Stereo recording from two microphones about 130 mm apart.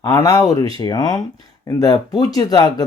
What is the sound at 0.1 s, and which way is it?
Speech, 25° left (ahead or behind).